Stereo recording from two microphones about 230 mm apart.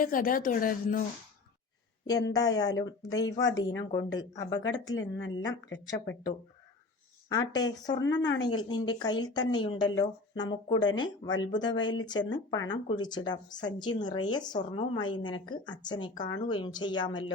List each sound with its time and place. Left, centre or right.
0.0 s speech: left
2.0 s speech: centre
4.9 s speech: left
7.3 s a woman's voice: centre